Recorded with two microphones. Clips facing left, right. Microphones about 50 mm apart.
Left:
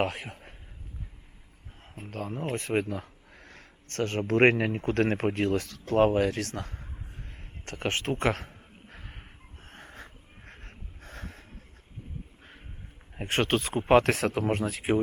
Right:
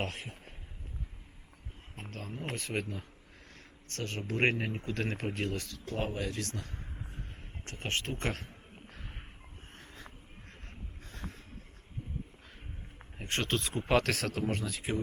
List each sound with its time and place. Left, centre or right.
2.0 s speech: centre
2.3 s speech: left
2.8 s a sound: left
4.7 s speech: left
7.1 s a sound: left
9.7 s sheep: left
11.0 s boat: left
13.1 s speech: left
13.7 s speech: centre
14.2 s speech: left
14.6 s speech: left